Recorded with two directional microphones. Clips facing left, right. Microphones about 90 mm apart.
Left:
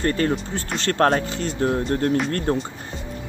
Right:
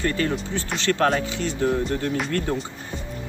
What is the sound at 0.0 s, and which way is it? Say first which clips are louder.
Speech: left 3 dB; 40° left (ahead or behind).